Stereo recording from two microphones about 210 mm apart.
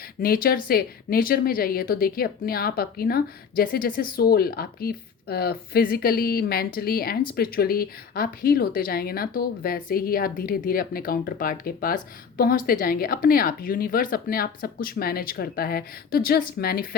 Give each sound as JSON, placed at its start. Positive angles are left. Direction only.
{"t": 0.2, "sound": "speech", "side_deg": 45}